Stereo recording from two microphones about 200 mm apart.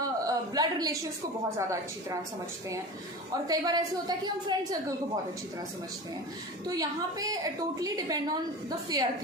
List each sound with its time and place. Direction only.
0.0 s a sound: 20° right (ahead or behind)
1.5 s a woman's voice: 15° right (ahead or behind)
3.4 s a woman's voice: 20° right (ahead or behind)
6.7 s a woman's voice: 20° right (ahead or behind)